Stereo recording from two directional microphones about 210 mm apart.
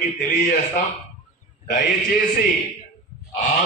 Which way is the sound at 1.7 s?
40° left (ahead or behind).